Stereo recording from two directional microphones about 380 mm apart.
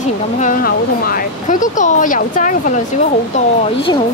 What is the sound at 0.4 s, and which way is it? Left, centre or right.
A woman's voice, left.